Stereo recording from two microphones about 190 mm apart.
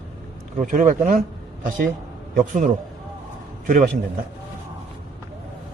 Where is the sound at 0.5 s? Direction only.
40° right (ahead or behind).